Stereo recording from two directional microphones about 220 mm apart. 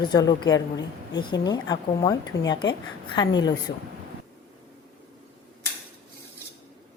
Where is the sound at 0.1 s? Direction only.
20° left (ahead or behind).